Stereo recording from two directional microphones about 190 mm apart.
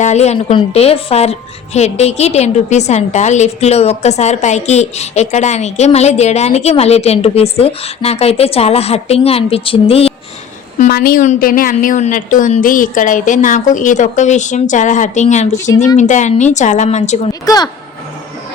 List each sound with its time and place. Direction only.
0.0 s a woman's voice: 35° left (ahead or behind)
10.8 s a woman's voice: 45° left (ahead or behind)
17.4 s speech: 20° left (ahead or behind)